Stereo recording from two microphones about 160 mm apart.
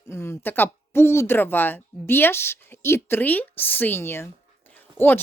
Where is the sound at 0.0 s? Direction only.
15° left (ahead or behind).